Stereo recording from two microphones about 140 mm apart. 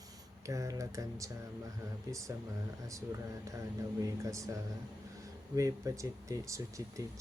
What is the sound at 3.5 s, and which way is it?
Speech, 20° right (ahead or behind).